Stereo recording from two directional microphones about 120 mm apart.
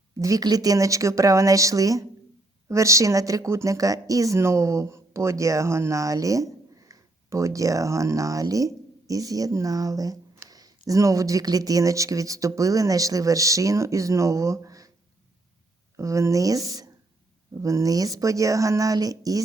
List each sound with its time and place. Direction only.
0.2 s speech: 30° right (ahead or behind)
16.0 s speech: 25° right (ahead or behind)